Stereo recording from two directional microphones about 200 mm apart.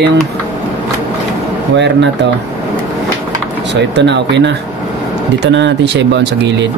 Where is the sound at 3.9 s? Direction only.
60° right (ahead or behind).